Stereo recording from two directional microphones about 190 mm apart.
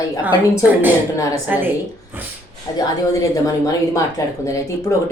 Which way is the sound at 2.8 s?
15° left (ahead or behind).